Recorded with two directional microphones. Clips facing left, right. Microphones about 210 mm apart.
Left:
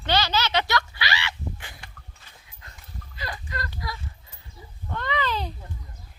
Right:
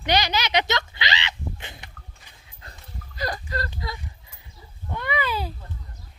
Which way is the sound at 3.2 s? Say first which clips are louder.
Right 6 dB; 40° right (ahead or behind).